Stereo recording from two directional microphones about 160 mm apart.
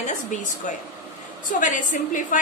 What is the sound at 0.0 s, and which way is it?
A woman's voice, 50° left (ahead or behind).